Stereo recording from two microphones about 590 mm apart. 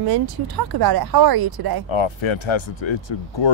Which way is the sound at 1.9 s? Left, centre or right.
Left.